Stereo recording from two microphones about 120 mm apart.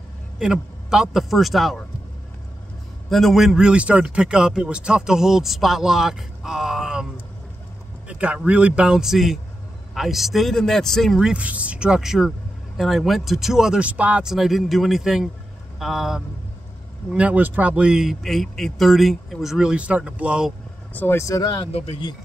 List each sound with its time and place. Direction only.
0.4 s speech: 5° right (ahead or behind)
3.1 s speech: centre (ahead or behind)
8.1 s speech: 10° right (ahead or behind)
20.9 s speech: 15° left (ahead or behind)